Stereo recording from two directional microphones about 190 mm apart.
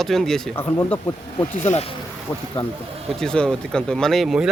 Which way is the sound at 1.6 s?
35° left (ahead or behind).